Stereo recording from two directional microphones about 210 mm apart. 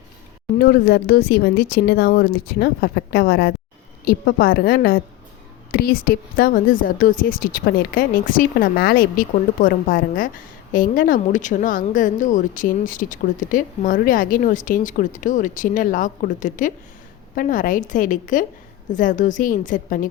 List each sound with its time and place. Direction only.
0.6 s speech: 50° left (ahead or behind)